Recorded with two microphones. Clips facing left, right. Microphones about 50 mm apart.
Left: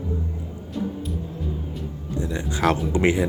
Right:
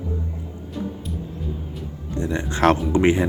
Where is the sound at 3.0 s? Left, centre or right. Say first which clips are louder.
Even; right.